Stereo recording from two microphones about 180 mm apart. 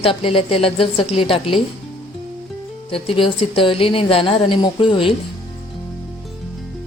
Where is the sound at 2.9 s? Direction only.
30° left (ahead or behind).